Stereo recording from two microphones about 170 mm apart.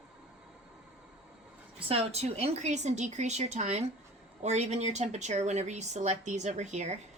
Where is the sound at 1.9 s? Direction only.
35° right (ahead or behind).